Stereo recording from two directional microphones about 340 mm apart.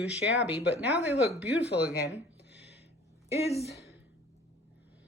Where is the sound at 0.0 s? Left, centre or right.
Centre.